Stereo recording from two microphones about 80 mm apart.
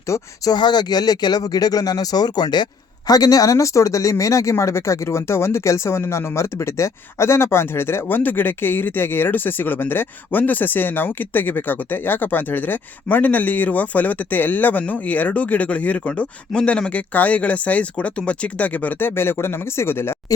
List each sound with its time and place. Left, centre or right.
0.5 s speech: left
3.1 s speech: left